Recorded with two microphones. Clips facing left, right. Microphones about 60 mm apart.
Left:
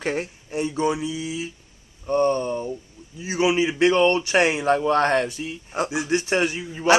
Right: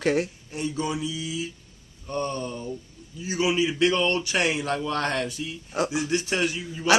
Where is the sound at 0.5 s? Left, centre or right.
Left.